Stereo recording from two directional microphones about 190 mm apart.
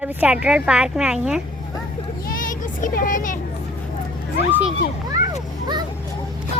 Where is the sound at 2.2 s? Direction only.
45° left (ahead or behind).